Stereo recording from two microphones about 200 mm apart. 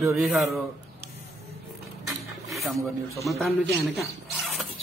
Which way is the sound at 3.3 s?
Centre (ahead or behind).